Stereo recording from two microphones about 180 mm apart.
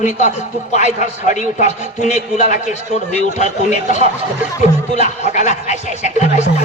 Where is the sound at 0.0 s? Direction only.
40° left (ahead or behind).